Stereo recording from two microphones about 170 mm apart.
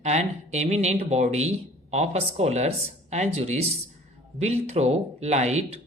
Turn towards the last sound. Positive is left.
turn(degrees=-40)  # may be behind; listen again after turning